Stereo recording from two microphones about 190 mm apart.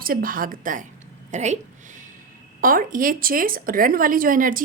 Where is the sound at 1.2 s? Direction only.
40° right (ahead or behind).